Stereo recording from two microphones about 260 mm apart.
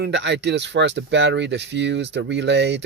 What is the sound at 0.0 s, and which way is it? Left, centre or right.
Speech, right.